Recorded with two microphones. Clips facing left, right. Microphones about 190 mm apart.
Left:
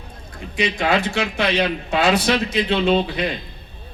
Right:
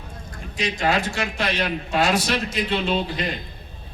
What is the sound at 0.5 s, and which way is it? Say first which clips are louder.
Speech: left 3 dB; 60° left (ahead or behind).